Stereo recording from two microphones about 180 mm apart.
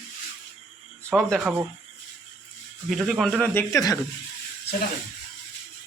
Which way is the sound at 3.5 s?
15° left (ahead or behind).